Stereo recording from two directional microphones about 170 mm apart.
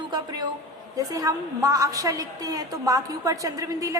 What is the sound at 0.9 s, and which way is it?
A woman's voice, 20° right (ahead or behind).